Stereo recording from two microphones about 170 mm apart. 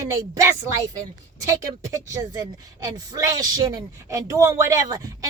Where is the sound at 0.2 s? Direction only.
20° right (ahead or behind).